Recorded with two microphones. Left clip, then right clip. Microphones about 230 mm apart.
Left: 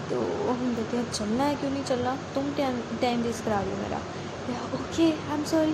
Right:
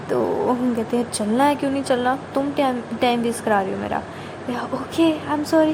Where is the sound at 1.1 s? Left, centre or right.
Right.